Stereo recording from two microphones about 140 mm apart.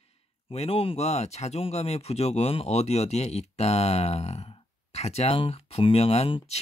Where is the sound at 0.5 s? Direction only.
45° left (ahead or behind).